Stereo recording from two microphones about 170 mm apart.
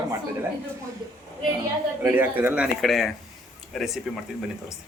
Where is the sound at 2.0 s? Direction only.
10° right (ahead or behind).